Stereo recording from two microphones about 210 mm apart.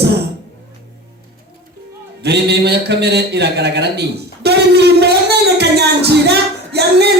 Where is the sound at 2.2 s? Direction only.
50° right (ahead or behind).